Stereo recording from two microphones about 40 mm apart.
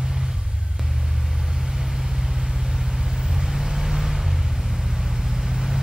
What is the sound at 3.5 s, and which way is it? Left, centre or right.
Vehicle, centre.